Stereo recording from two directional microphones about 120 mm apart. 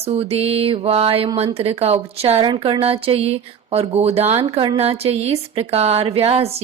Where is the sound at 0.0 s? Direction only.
55° right (ahead or behind).